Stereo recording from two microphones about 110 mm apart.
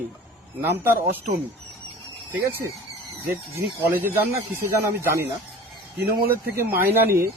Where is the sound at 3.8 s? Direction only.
20° right (ahead or behind).